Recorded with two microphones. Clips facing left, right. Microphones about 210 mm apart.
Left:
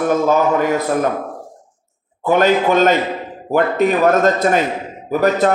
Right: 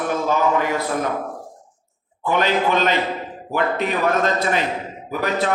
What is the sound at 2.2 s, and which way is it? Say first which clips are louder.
A man's voice: left 6 dB; 45° left (ahead or behind).